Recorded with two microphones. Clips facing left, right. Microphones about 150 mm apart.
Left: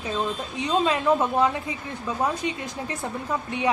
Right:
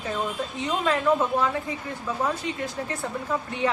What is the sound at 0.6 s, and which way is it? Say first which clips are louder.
Speech: left 3 dB; 15° left (ahead or behind).